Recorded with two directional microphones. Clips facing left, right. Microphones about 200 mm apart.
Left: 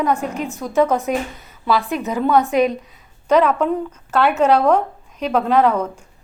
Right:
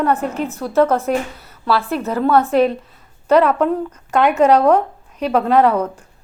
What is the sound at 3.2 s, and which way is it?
Speech, 10° right (ahead or behind).